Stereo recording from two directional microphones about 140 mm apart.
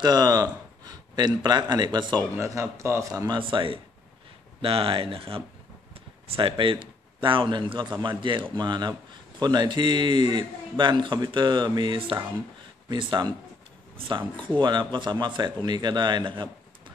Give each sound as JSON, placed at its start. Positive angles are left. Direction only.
{"t": 0.0, "sound": "speech", "side_deg": -30}
{"t": 2.3, "sound": "speech", "side_deg": -20}
{"t": 3.3, "sound": "a man's voice", "side_deg": -40}